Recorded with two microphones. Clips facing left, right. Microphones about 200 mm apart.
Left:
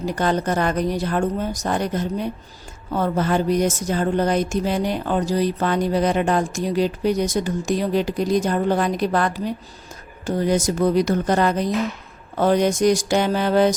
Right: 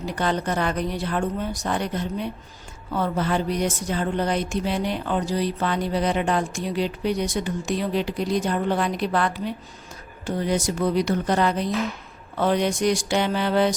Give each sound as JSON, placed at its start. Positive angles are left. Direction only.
{"t": 0.0, "sound": "a woman's voice", "side_deg": 45}